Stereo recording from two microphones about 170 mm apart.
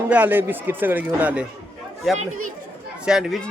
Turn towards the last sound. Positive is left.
turn(degrees=0)  # may be behind; listen again after turning